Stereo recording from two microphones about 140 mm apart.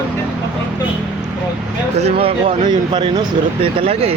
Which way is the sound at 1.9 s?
45° right (ahead or behind).